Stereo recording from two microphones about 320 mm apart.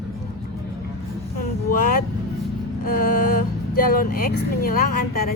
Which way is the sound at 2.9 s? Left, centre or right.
Left.